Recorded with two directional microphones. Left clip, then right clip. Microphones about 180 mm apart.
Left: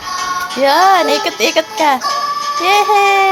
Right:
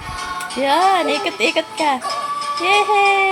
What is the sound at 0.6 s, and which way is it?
Speech, 20° left (ahead or behind).